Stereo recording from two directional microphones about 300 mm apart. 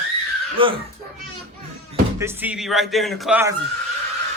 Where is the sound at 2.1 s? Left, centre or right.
Centre.